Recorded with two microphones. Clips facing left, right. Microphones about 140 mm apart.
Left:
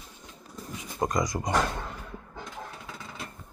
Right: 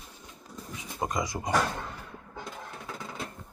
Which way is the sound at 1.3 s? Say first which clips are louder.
Left 2 dB; 15° left (ahead or behind).